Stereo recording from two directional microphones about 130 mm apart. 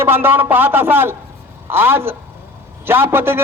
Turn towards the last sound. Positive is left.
turn(degrees=-15)  # may be behind; listen again after turning